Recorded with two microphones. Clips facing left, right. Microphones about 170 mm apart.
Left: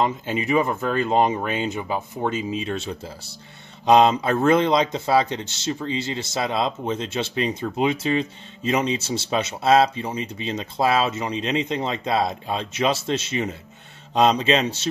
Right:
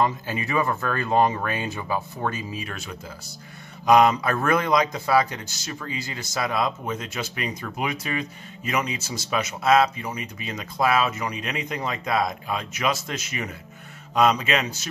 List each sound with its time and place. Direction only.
0.0 s speech: 20° left (ahead or behind)